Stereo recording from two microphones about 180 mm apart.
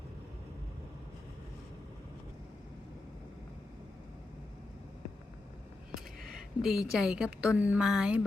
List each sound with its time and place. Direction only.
6.6 s a woman's voice: centre (ahead or behind)